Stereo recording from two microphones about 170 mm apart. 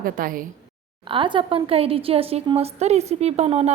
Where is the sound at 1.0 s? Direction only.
30° right (ahead or behind).